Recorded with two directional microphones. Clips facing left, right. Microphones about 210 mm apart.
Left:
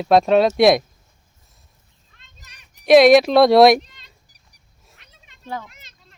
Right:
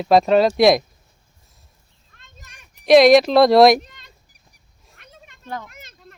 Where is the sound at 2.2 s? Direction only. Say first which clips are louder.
Right 5 dB; 50° right (ahead or behind).